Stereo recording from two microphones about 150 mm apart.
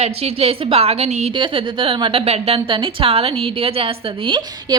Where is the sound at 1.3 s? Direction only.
30° right (ahead or behind).